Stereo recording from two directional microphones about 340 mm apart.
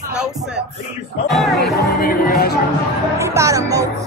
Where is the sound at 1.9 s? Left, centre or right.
Left.